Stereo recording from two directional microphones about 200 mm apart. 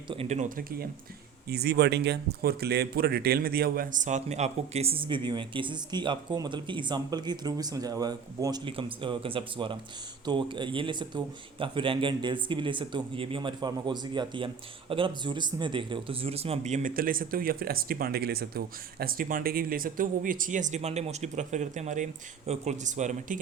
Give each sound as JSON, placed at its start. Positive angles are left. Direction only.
{"t": 0.1, "sound": "speech", "side_deg": -30}
{"t": 1.5, "sound": "speech", "side_deg": -55}